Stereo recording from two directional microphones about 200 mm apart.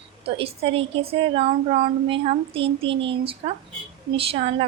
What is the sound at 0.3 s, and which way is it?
A woman's voice, 30° right (ahead or behind).